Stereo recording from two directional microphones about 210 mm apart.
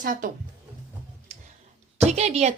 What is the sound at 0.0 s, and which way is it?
Speech, 40° right (ahead or behind).